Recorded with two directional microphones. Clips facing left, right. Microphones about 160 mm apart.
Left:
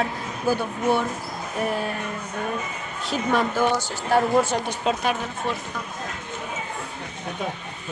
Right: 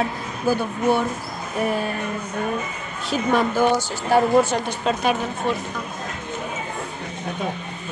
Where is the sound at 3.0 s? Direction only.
5° right (ahead or behind).